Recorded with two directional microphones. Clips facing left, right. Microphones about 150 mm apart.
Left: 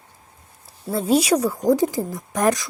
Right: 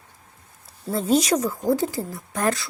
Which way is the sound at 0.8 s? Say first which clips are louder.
Left 2 dB; centre (ahead or behind).